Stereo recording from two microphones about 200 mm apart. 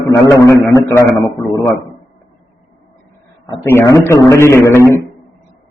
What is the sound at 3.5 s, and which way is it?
A man's voice, 15° left (ahead or behind).